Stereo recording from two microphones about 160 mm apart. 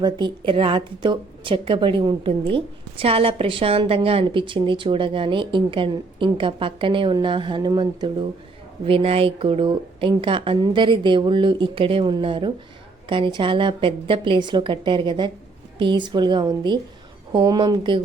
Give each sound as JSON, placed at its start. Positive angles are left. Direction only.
{"t": 0.0, "sound": "a woman's voice", "side_deg": -30}
{"t": 8.8, "sound": "a woman's voice", "side_deg": -35}